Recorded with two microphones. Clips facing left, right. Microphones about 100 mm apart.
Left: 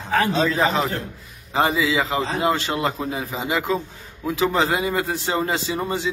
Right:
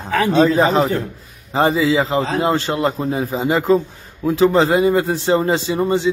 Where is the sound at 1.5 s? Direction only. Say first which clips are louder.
Right 5 dB; 35° right (ahead or behind).